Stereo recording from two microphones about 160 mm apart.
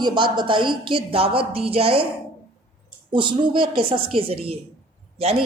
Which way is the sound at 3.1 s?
30° right (ahead or behind).